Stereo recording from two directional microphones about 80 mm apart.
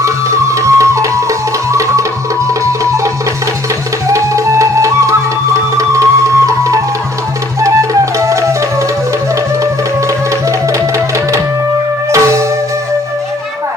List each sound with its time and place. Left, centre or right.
0.0 s music: right
4.1 s music: right
10.7 s music: right